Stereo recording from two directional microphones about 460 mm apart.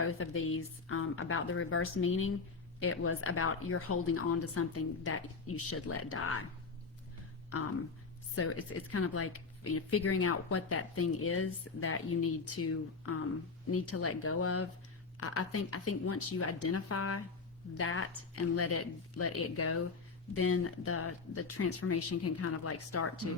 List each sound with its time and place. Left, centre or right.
0.0 s speech: left
8.4 s speech: left